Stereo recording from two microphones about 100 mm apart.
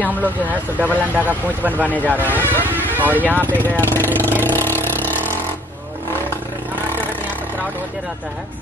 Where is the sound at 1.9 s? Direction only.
15° left (ahead or behind).